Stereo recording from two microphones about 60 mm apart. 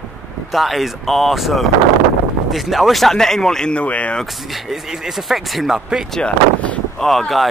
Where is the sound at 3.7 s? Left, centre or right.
Left.